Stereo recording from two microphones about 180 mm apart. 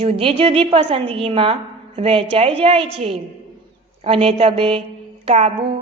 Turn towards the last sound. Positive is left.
turn(degrees=-35)  # may be behind; listen again after turning